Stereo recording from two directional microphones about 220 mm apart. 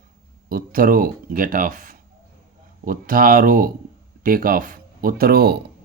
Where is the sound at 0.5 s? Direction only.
40° right (ahead or behind).